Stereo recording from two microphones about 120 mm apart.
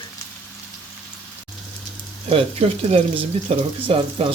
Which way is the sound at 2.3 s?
55° right (ahead or behind).